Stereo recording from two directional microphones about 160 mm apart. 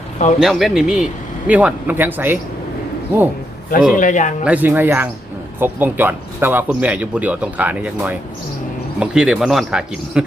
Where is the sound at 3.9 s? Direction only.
55° left (ahead or behind).